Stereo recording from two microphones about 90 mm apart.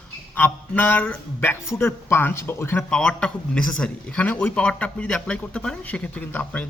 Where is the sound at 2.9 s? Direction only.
10° left (ahead or behind).